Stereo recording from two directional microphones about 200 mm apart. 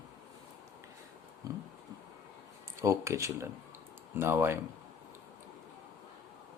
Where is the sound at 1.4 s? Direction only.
20° right (ahead or behind).